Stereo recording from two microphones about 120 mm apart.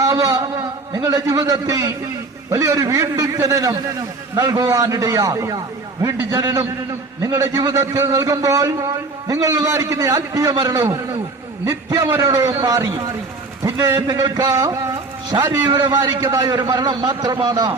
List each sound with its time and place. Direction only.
0.0 s a sound: 30° right (ahead or behind)
0.9 s a man's voice: 30° right (ahead or behind)
10.8 s a man's voice: 20° right (ahead or behind)